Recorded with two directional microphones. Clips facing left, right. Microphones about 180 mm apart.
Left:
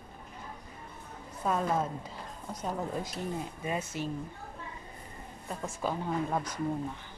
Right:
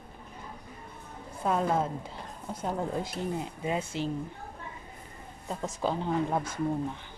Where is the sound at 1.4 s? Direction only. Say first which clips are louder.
Right 2 dB; 15° right (ahead or behind).